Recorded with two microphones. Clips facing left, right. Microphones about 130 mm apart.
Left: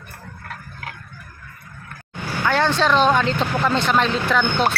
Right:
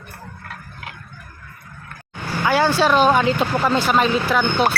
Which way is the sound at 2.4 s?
5° right (ahead or behind).